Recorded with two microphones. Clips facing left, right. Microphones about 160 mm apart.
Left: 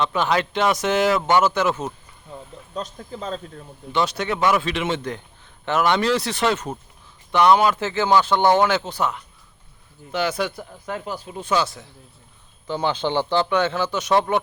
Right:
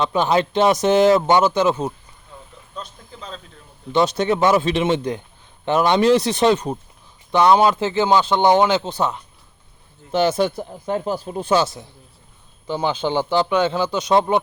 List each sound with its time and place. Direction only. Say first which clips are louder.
0.1 s speech: right 3 dB; 25° right (ahead or behind)
2.7 s speech: left 5 dB; 40° left (ahead or behind)
3.9 s speech: right 5 dB; 20° right (ahead or behind)
12.6 s a man's voice: right 1 dB; 10° right (ahead or behind)